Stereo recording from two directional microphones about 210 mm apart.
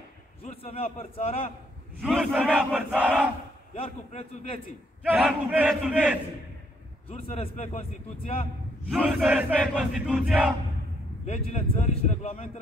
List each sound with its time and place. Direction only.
0.4 s speech: 30° left (ahead or behind)
2.0 s battle cry: centre (ahead or behind)
3.7 s speech: 30° left (ahead or behind)
5.0 s battle cry: 5° right (ahead or behind)
7.3 s speech: 30° left (ahead or behind)
8.8 s battle cry: centre (ahead or behind)
11.2 s speech: 30° left (ahead or behind)